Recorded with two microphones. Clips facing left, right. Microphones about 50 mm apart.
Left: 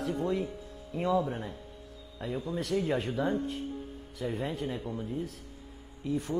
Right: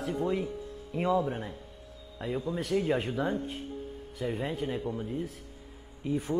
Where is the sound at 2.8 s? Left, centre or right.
Centre.